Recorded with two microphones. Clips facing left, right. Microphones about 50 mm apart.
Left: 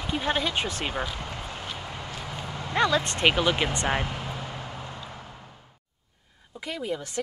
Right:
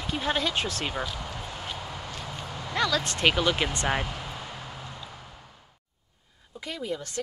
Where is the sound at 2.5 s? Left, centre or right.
Left.